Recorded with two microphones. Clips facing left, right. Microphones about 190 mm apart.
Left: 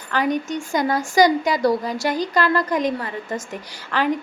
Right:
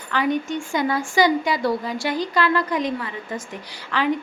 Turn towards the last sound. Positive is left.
turn(degrees=45)  # may be behind; listen again after turning